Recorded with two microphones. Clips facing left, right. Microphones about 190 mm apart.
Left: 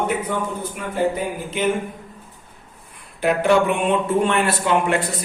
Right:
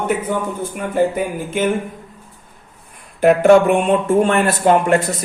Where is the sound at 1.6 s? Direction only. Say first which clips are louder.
Right 3 dB; 50° right (ahead or behind).